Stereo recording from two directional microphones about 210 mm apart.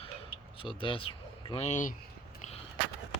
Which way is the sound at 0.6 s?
25° left (ahead or behind).